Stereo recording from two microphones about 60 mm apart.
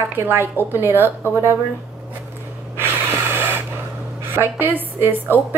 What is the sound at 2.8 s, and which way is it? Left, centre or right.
Snort, right.